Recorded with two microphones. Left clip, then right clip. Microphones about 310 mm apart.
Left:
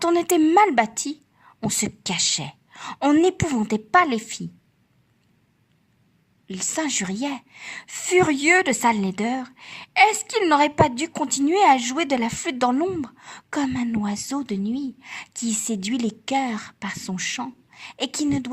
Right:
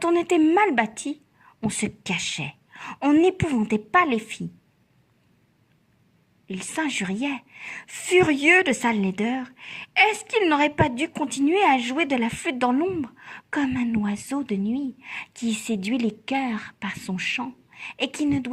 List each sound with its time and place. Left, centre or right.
0.0 s a woman's voice: left
4.1 s a woman's voice: centre
6.5 s a woman's voice: left